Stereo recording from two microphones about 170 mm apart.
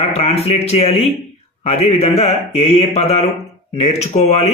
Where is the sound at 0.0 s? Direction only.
35° left (ahead or behind).